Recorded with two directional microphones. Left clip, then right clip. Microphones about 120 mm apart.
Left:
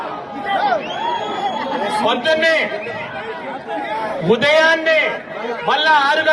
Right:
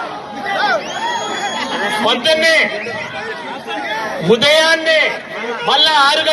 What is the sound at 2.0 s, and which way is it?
Speech, centre (ahead or behind).